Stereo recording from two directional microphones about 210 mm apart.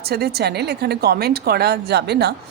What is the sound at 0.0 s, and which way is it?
A woman's voice, 50° right (ahead or behind).